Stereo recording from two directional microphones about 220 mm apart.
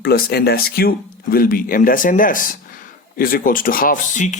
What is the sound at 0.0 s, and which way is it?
Speech, 45° left (ahead or behind).